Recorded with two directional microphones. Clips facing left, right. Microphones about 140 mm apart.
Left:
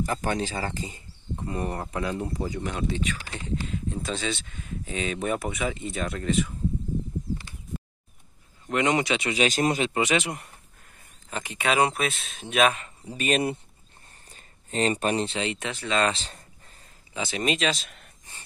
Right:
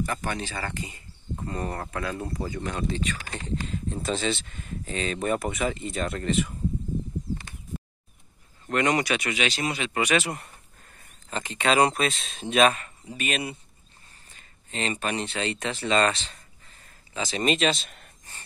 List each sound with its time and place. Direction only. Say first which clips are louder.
0.0 s speech: left 3 dB; 35° left (ahead or behind)
0.6 s speech: left 2 dB; 25° left (ahead or behind)
1.4 s speech: left 1 dB; 10° left (ahead or behind)
3.2 s speech: even; 50° right (ahead or behind)
3.7 s speech: right 2 dB; centre (ahead or behind)
8.6 s speech: even; 20° left (ahead or behind)
9.3 s speech: left 4 dB; 40° left (ahead or behind)
9.8 s speech: even; 20° left (ahead or behind); by 12.7 s 5° left (ahead or behind)
13.0 s speech: left 5 dB; 35° left (ahead or behind)
14.3 s a sound: left 6 dB; 40° left (ahead or behind)
15.3 s speech: even; 10° left (ahead or behind)
15.9 s speech: right 2 dB; centre (ahead or behind)
17.8 s a sound: even; centre (ahead or behind)